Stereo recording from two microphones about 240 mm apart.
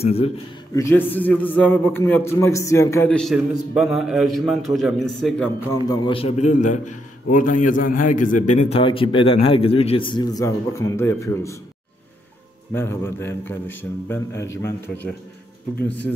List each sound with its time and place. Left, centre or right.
0.0 s a man's voice: left
0.7 s a man's voice: centre
5.9 s a man's voice: left
12.7 s a man's voice: centre